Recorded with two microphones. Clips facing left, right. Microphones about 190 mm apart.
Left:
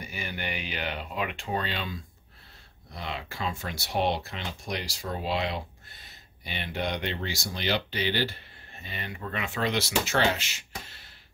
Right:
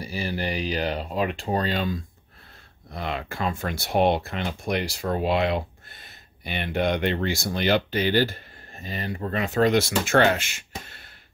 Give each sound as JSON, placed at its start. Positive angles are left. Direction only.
{"t": 0.0, "sound": "speech", "side_deg": -35}
{"t": 2.9, "sound": "speech", "side_deg": -55}